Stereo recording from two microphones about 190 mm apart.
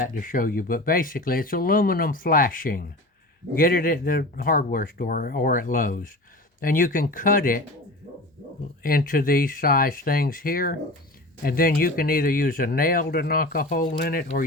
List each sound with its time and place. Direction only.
0.0 s speech: 45° left (ahead or behind)
8.8 s speech: 50° left (ahead or behind)